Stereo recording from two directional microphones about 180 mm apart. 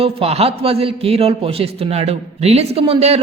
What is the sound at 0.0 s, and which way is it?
A man's voice, 35° right (ahead or behind).